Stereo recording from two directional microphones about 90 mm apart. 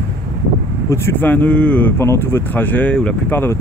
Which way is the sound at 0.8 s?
30° left (ahead or behind).